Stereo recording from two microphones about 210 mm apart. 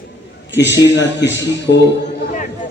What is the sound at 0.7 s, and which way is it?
A man's voice, 60° left (ahead or behind).